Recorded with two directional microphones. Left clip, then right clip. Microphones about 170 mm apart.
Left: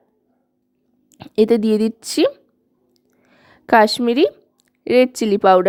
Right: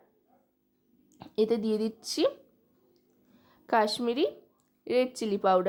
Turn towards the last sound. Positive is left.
turn(degrees=45)  # may be behind; listen again after turning